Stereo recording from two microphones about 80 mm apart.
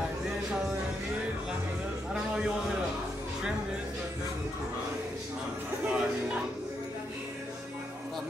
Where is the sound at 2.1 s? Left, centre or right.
Centre.